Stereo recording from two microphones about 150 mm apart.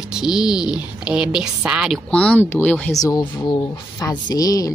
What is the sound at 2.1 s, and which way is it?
Speech, 10° left (ahead or behind).